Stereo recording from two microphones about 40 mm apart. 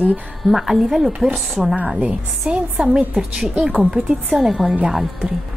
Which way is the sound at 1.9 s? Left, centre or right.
Right.